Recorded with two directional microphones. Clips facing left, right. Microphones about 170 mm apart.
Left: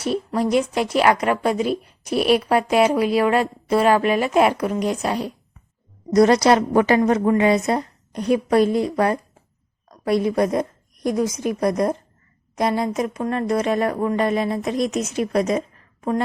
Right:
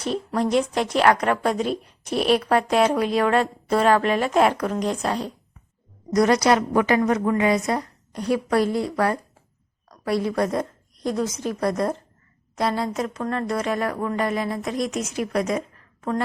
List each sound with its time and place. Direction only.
0.0 s a woman's voice: 5° left (ahead or behind)
6.1 s a woman's voice: 30° left (ahead or behind)